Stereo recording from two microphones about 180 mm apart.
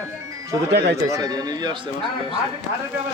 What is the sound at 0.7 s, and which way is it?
Speech, 70° right (ahead or behind).